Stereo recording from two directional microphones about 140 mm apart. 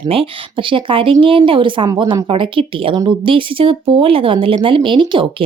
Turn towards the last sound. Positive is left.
turn(degrees=-35)  # may be behind; listen again after turning